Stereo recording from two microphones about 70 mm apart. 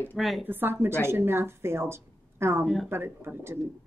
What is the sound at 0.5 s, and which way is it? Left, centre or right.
Speech, right.